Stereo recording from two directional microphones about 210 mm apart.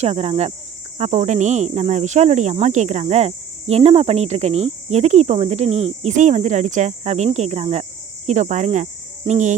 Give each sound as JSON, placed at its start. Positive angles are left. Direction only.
{"t": 0.0, "sound": "speech", "side_deg": -30}
{"t": 8.3, "sound": "cricket", "side_deg": -35}